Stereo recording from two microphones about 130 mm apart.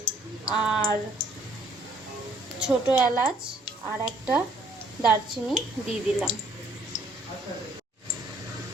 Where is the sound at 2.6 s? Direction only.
10° right (ahead or behind).